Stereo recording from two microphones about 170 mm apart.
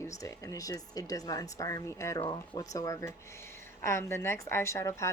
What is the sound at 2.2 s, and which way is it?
Speech, 30° left (ahead or behind).